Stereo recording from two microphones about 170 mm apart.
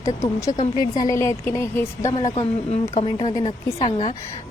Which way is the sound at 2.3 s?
40° left (ahead or behind).